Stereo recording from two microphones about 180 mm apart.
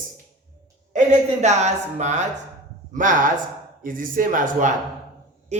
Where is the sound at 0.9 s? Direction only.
40° right (ahead or behind).